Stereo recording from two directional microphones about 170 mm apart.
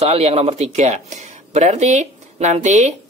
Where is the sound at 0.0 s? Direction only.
35° right (ahead or behind).